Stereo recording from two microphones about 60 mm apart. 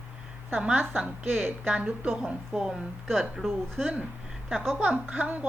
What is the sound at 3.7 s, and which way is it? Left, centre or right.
Speech, right.